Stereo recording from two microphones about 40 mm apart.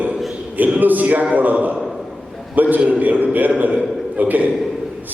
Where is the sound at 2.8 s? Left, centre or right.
Right.